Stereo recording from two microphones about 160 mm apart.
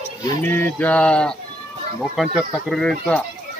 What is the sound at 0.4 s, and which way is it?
Speech, 10° left (ahead or behind).